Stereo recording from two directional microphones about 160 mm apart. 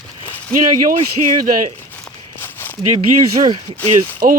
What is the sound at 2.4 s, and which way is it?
Walk, 15° left (ahead or behind).